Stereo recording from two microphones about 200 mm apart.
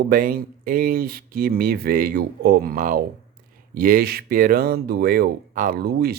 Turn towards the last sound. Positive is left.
turn(degrees=-50)  # may be behind; listen again after turning